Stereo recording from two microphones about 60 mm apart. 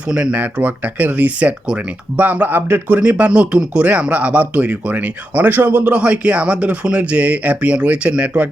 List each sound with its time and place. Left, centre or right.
0.1 s speech: right